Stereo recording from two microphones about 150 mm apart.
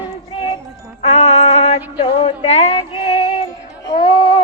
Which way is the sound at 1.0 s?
45° left (ahead or behind).